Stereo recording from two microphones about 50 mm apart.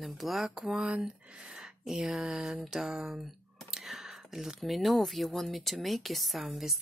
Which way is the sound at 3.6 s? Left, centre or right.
Centre.